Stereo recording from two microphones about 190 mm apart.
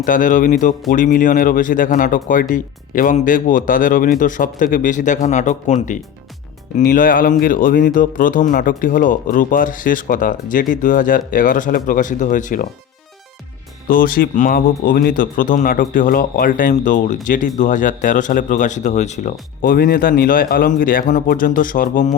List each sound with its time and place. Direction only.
0.0 s speech: 45° left (ahead or behind)
13.8 s speech: 50° left (ahead or behind)